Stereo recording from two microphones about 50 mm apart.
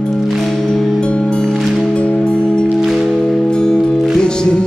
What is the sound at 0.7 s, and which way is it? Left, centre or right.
Music, centre.